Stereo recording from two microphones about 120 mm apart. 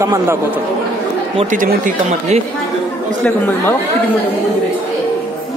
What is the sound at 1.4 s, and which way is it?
Speech, 85° right.